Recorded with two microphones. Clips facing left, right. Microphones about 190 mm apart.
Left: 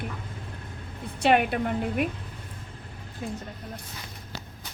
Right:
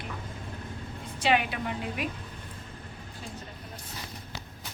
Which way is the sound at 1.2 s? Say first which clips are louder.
Left 5 dB; 55° left (ahead or behind).